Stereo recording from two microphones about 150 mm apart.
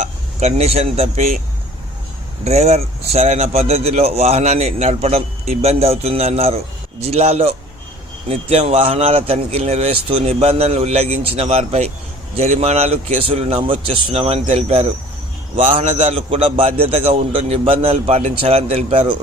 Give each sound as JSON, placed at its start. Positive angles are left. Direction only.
{"t": 0.0, "sound": "speech", "side_deg": -50}
{"t": 2.4, "sound": "a man's voice", "side_deg": -45}